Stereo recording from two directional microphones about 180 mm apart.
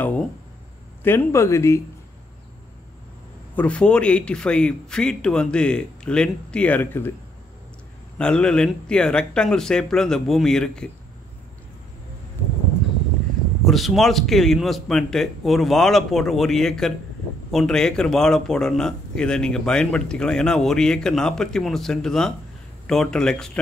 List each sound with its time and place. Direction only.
1.0 s a man's voice: 15° left (ahead or behind)
3.5 s speech: 5° left (ahead or behind)
8.2 s speech: 5° left (ahead or behind)
13.7 s speech: centre (ahead or behind)